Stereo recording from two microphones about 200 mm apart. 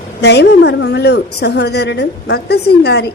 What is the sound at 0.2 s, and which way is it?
A woman's voice, 55° left (ahead or behind).